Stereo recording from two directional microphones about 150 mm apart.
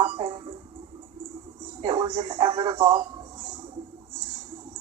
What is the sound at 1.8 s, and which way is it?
Speech, 30° right (ahead or behind).